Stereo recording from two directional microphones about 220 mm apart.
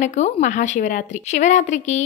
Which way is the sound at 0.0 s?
35° left (ahead or behind).